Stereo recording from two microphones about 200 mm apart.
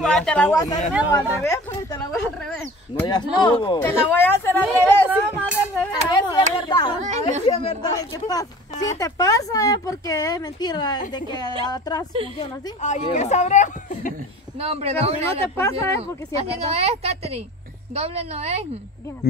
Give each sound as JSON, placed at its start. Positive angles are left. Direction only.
{"t": 0.0, "sound": "speech", "side_deg": 5}
{"t": 3.0, "sound": "speech", "side_deg": 20}
{"t": 3.8, "sound": "speech", "side_deg": 10}
{"t": 5.4, "sound": "music", "side_deg": 10}
{"t": 6.3, "sound": "a sound", "side_deg": 20}
{"t": 7.0, "sound": "speech", "side_deg": -35}
{"t": 7.4, "sound": "speech", "side_deg": 25}
{"t": 12.4, "sound": "speech", "side_deg": 30}
{"t": 14.6, "sound": "a woman's voice", "side_deg": -30}
{"t": 15.5, "sound": "speech", "side_deg": 15}
{"t": 16.3, "sound": "a woman's voice", "side_deg": -30}